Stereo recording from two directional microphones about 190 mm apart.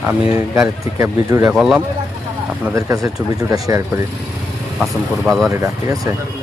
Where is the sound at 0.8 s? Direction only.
15° right (ahead or behind).